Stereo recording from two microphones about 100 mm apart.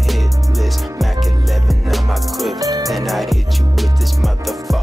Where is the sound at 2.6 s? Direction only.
35° right (ahead or behind).